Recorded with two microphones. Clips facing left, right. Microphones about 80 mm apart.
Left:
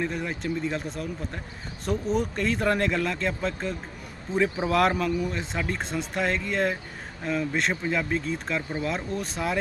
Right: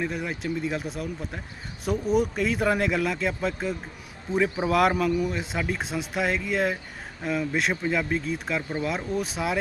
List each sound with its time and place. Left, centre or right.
0.0 s speech: centre